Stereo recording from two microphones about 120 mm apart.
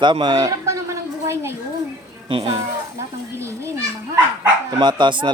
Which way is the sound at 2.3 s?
50° right (ahead or behind).